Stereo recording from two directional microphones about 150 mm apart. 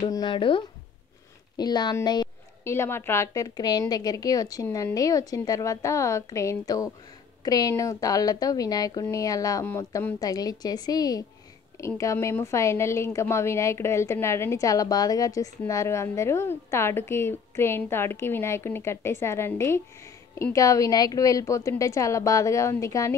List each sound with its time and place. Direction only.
0.1 s a woman's voice: 30° left (ahead or behind)
2.6 s a woman's voice: 15° left (ahead or behind)